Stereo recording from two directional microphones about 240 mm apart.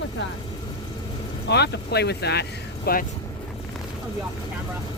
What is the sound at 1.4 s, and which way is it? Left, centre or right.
Speech, left.